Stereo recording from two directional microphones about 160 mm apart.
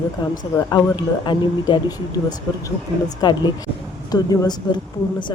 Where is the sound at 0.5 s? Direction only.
20° left (ahead or behind).